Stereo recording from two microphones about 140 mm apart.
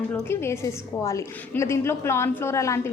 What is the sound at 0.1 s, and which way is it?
A woman's voice, 15° left (ahead or behind).